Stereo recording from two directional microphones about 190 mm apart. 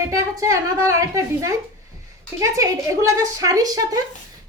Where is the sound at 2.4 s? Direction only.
15° right (ahead or behind).